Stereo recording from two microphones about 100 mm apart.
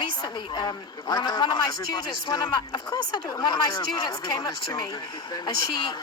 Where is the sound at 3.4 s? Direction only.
35° left (ahead or behind).